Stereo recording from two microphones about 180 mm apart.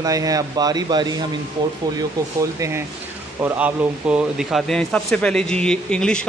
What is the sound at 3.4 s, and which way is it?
Speech, 10° right (ahead or behind).